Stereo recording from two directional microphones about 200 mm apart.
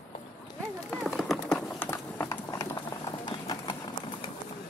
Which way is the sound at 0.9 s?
Centre (ahead or behind).